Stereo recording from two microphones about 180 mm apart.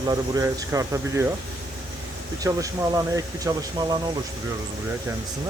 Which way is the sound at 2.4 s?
20° right (ahead or behind).